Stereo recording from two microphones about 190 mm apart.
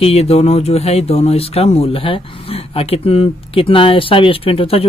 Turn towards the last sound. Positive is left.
turn(degrees=30)  # may be behind; listen again after turning